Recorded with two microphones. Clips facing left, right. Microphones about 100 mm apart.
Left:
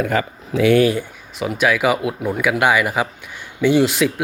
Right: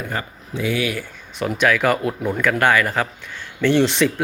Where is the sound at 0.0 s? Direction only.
90° left.